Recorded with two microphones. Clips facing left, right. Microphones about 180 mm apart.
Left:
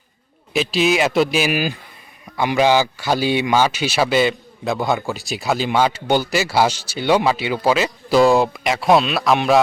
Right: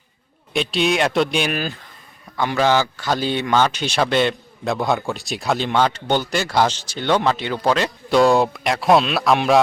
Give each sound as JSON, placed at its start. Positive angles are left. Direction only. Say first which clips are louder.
{"t": 0.5, "sound": "a man's voice", "louder": "left 2 dB", "side_deg": 0}